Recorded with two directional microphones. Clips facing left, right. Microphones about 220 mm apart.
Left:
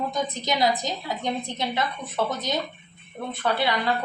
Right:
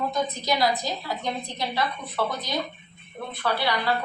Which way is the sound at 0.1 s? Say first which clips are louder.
Right 1 dB; 20° left (ahead or behind).